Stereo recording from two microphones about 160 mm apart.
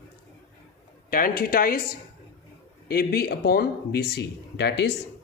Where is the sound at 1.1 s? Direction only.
60° left (ahead or behind); by 4.9 s 90° left.